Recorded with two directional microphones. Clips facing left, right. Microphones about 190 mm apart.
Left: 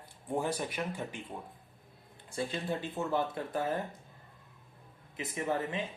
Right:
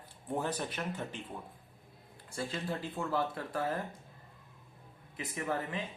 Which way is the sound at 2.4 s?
20° left (ahead or behind).